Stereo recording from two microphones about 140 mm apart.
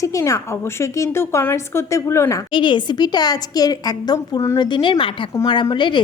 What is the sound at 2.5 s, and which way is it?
A woman's voice, 35° left (ahead or behind).